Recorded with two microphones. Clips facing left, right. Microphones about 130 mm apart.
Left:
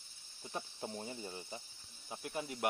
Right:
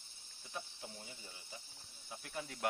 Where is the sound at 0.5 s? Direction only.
40° left (ahead or behind).